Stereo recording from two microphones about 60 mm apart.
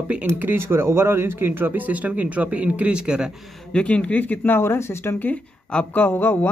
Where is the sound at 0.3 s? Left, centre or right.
Right; by 3.3 s centre.